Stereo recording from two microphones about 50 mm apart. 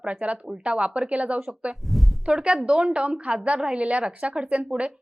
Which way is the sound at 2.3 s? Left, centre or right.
Centre.